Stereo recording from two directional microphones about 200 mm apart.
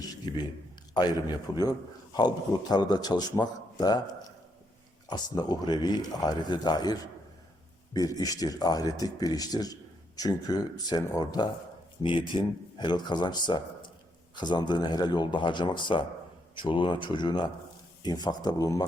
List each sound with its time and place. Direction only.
0.9 s speech: 20° left (ahead or behind)